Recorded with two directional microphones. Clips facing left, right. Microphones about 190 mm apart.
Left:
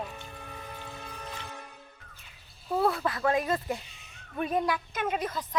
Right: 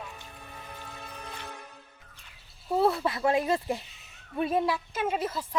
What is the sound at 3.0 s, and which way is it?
Speech, 25° right (ahead or behind).